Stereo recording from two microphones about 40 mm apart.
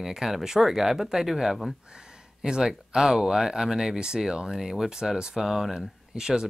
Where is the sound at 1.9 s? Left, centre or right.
Centre.